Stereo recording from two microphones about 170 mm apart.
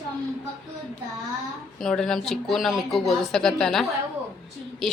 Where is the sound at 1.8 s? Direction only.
5° left (ahead or behind).